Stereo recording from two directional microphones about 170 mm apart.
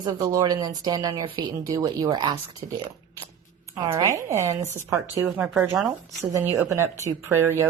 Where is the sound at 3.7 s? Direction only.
20° right (ahead or behind).